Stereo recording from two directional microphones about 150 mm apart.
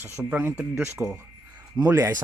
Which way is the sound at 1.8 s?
15° right (ahead or behind).